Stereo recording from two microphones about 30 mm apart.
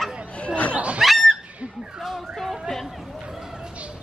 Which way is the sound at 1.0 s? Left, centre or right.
Centre.